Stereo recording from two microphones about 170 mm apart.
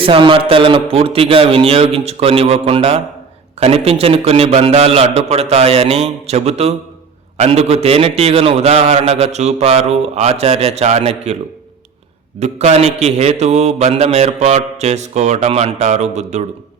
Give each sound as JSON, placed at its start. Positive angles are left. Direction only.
{"t": 0.0, "sound": "a man's voice", "side_deg": -30}
{"t": 12.4, "sound": "a man's voice", "side_deg": -40}